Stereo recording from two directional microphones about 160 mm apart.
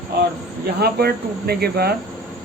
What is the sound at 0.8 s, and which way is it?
Speech, 80° right.